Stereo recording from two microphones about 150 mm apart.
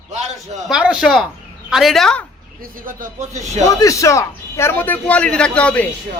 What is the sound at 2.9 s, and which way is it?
Speech, 65° right (ahead or behind).